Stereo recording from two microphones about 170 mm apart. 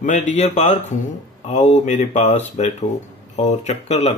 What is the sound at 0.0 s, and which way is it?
Speech, 45° left (ahead or behind).